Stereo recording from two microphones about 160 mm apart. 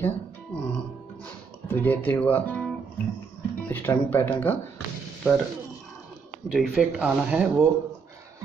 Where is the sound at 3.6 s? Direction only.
15° left (ahead or behind).